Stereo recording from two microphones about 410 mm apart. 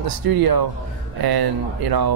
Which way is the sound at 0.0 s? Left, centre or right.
Right.